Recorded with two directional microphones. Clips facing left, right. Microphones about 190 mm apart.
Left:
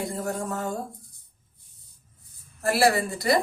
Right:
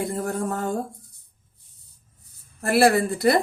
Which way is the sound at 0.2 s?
50° right (ahead or behind).